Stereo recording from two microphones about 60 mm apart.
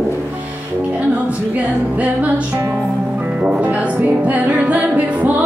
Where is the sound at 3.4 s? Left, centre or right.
Right.